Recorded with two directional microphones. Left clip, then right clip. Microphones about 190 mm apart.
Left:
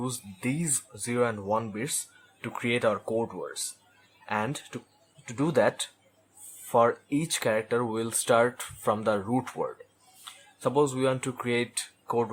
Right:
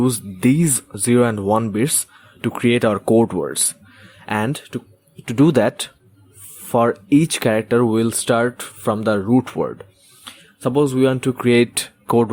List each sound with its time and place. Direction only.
0.0 s speech: 35° right (ahead or behind)